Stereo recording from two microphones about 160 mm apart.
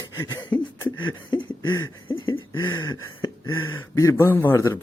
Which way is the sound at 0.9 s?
30° left (ahead or behind).